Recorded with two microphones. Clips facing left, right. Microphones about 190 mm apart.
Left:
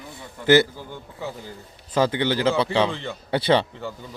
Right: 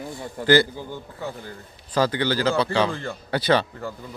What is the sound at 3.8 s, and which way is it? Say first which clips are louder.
Speech: even; centre (ahead or behind).